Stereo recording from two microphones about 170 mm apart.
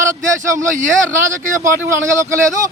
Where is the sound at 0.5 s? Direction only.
50° right (ahead or behind).